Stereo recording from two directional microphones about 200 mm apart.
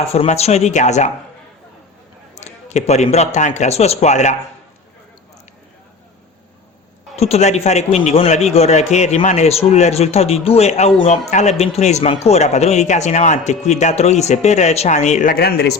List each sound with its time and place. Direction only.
0.1 s a man's voice: 30° left (ahead or behind)
2.3 s a man's voice: 35° left (ahead or behind)
7.2 s a man's voice: 30° left (ahead or behind); by 15.8 s 55° left (ahead or behind)